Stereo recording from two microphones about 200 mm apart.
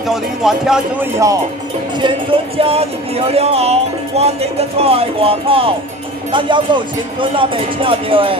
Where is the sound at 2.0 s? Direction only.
25° right (ahead or behind).